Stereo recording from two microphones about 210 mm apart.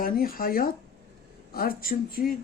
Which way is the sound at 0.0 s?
45° left (ahead or behind).